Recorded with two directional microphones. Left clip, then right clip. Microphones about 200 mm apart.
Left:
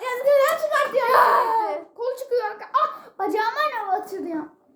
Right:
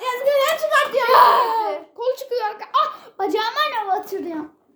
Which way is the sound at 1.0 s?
20° right (ahead or behind).